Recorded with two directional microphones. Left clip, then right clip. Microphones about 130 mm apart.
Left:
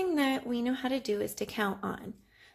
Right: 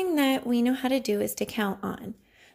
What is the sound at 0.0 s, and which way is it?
Speech, 45° right (ahead or behind).